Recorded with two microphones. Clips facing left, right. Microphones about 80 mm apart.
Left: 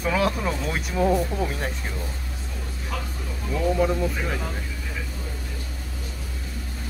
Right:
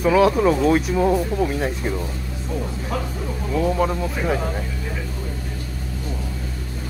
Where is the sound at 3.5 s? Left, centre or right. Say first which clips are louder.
Right 2 dB; centre.